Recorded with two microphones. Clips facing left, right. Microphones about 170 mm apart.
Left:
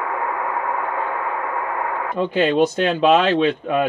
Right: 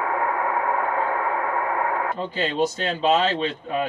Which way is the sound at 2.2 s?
65° left (ahead or behind).